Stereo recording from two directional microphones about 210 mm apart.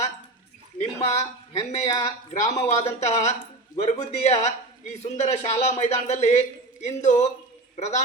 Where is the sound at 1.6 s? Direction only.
30° left (ahead or behind).